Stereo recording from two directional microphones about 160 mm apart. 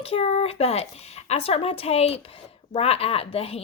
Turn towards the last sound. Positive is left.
turn(degrees=35)  # may be behind; listen again after turning